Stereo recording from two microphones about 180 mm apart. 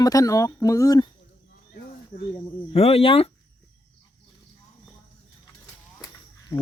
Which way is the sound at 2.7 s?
35° left (ahead or behind).